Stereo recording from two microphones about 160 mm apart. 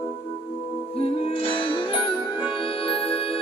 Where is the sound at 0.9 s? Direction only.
40° left (ahead or behind).